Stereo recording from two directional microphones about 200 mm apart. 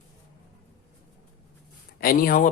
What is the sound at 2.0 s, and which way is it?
Speech, 45° left (ahead or behind).